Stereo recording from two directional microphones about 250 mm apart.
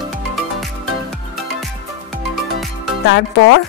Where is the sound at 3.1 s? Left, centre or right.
Left.